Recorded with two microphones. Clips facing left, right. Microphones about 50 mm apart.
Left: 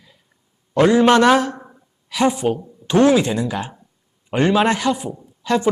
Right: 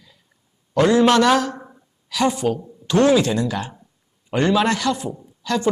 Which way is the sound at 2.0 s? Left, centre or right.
Left.